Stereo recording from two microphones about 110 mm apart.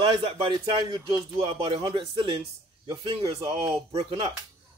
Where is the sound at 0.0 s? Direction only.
55° right (ahead or behind).